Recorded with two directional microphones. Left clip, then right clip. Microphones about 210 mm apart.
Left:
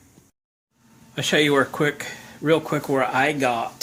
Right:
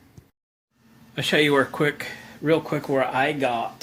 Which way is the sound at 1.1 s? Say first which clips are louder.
Left 1 dB; 10° left (ahead or behind).